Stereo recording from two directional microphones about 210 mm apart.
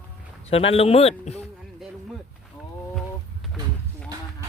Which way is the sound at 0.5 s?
30° left (ahead or behind).